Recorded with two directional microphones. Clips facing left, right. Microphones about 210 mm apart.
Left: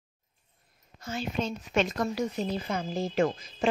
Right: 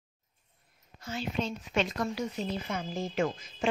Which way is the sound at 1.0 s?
45° left (ahead or behind).